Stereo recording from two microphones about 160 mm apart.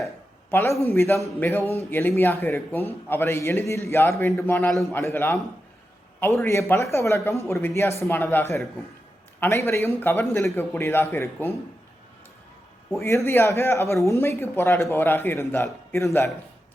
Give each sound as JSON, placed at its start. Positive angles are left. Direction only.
{"t": 0.5, "sound": "speech", "side_deg": 15}
{"t": 12.9, "sound": "speech", "side_deg": 15}